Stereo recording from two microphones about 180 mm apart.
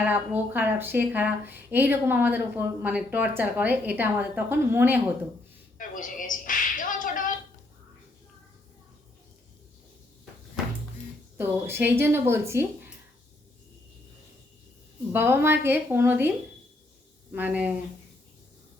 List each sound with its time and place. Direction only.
0.1 s speech: 10° right (ahead or behind)
5.7 s a sound: 50° left (ahead or behind)
11.3 s speech: 10° right (ahead or behind)
15.1 s speech: 10° right (ahead or behind)
17.3 s speech: 10° right (ahead or behind)